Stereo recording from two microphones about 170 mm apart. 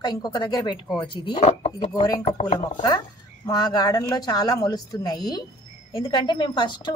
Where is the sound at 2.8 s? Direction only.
25° left (ahead or behind).